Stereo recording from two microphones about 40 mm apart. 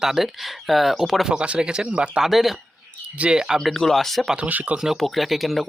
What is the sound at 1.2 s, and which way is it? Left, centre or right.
Speech, right.